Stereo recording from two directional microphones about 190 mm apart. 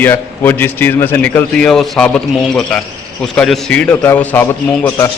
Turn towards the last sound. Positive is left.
turn(degrees=10)  # may be behind; listen again after turning